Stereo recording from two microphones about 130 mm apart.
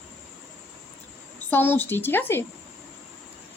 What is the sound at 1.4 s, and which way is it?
A woman's voice, 15° left (ahead or behind).